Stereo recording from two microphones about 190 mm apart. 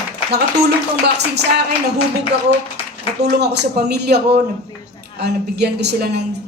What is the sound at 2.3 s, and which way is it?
A woman's voice, 65° right (ahead or behind).